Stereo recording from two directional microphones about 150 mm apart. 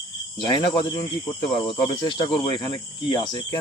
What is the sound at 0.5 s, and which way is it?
Speech, 30° left (ahead or behind).